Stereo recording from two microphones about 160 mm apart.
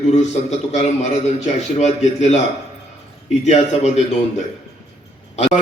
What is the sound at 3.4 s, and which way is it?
Speech, 45° left (ahead or behind).